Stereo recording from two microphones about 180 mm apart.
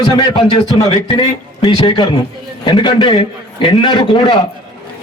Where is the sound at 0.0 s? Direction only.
30° left (ahead or behind).